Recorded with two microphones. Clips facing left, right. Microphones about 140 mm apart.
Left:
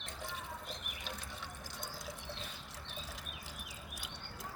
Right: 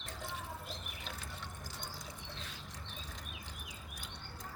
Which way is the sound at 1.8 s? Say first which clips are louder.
Left 4 dB; centre (ahead or behind).